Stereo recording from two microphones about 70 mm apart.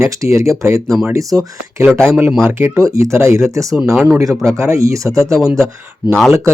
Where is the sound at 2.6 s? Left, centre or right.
Right.